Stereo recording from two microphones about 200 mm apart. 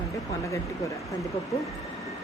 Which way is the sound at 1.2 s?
Centre (ahead or behind).